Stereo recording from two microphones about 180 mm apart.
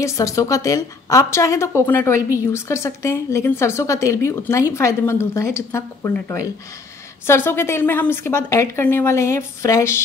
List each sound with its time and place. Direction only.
0.0 s a woman's voice: 15° left (ahead or behind)